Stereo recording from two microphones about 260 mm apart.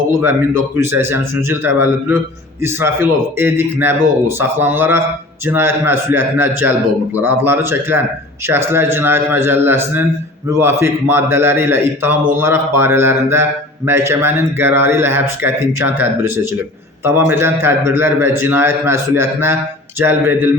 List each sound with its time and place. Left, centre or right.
0.8 s a man's voice: centre